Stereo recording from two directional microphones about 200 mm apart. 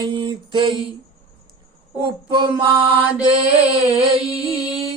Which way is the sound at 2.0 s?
25° right (ahead or behind).